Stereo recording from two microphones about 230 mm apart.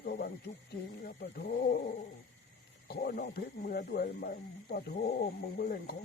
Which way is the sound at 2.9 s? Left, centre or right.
Left.